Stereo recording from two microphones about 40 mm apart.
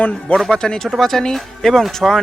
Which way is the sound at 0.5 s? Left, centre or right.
Left.